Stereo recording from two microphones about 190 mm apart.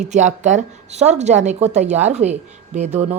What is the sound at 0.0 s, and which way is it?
A woman's voice, 40° right (ahead or behind).